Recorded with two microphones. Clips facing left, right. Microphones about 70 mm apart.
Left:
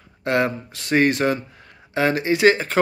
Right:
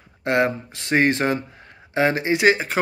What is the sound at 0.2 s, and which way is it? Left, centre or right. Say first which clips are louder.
Speech: right 1 dB; right.